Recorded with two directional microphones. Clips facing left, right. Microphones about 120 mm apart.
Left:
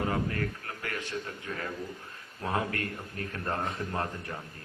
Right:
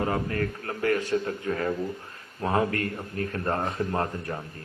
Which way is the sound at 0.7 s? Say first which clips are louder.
Right 11 dB; 40° right (ahead or behind).